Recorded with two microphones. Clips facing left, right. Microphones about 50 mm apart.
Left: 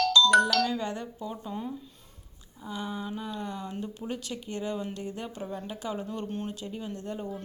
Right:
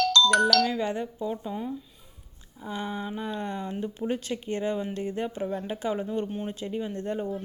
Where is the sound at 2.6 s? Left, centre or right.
Right.